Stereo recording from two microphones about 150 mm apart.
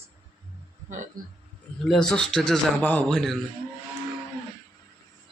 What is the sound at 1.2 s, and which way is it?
Speech, 70° right (ahead or behind).